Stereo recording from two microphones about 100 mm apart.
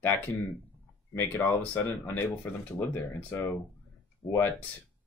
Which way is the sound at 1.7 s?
25° left (ahead or behind).